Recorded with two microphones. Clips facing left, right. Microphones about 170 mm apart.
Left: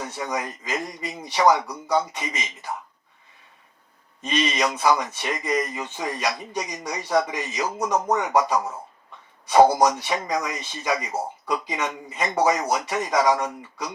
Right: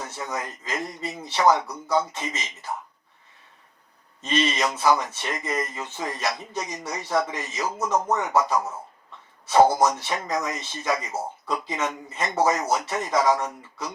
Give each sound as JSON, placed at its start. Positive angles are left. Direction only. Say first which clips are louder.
{"t": 0.3, "sound": "speech", "louder": "left 3 dB", "side_deg": 15}
{"t": 4.2, "sound": "speech", "louder": "even", "side_deg": 15}